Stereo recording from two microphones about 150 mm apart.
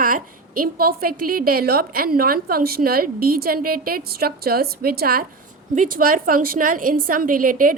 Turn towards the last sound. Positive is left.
turn(degrees=-65)  # may be behind; listen again after turning